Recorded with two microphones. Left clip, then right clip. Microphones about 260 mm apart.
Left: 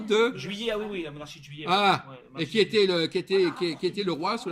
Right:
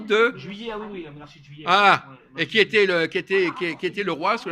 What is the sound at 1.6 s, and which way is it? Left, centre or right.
A man's voice, centre.